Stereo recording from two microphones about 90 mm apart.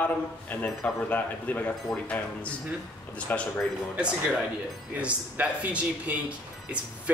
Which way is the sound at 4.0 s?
10° right (ahead or behind).